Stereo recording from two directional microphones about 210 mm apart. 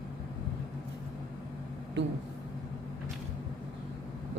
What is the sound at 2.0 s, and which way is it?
Speech, 60° right (ahead or behind).